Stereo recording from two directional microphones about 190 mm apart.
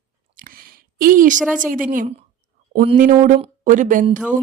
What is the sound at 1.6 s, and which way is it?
Speech, 45° right (ahead or behind).